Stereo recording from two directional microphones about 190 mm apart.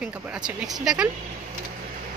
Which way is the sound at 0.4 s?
20° right (ahead or behind).